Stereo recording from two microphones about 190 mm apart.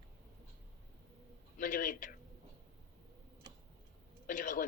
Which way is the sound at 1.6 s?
45° left (ahead or behind).